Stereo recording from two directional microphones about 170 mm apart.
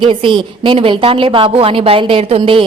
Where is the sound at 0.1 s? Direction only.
30° right (ahead or behind).